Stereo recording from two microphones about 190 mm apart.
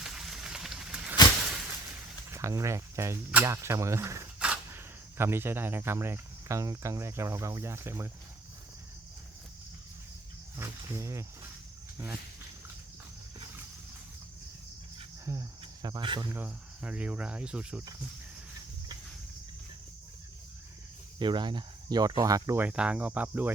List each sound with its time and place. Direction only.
0.0 s a sound: centre (ahead or behind)
2.3 s speech: 15° right (ahead or behind)
10.6 s speech: 15° right (ahead or behind)
15.2 s cricket: 15° right (ahead or behind)
16.3 s speech: 10° right (ahead or behind)
21.2 s speech: 25° right (ahead or behind)